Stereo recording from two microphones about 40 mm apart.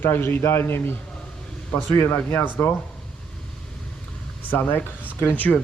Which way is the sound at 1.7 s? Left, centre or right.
Left.